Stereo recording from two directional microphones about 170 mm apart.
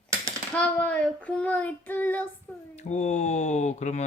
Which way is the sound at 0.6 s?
10° left (ahead or behind).